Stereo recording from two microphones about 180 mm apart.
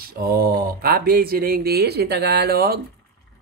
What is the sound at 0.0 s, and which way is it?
Speech, 55° right (ahead or behind).